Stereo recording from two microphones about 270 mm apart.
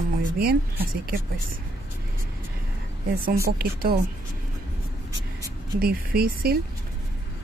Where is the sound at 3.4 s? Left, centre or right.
Right.